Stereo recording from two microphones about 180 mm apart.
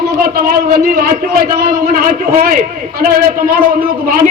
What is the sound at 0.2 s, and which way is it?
A man's voice, 55° right (ahead or behind).